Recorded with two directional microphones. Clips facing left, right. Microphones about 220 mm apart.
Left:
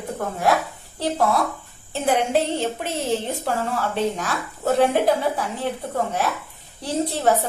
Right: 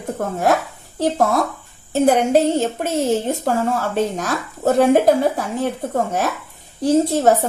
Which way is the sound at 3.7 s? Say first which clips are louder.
Right 3 dB; 45° right (ahead or behind).